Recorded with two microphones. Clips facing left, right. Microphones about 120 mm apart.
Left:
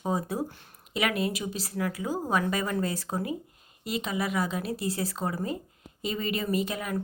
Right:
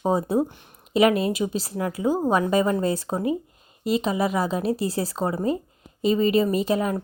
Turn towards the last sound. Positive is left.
turn(degrees=-30)  # may be behind; listen again after turning